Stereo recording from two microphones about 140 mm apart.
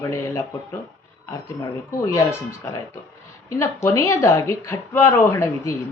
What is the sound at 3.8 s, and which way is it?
Speech, 20° left (ahead or behind).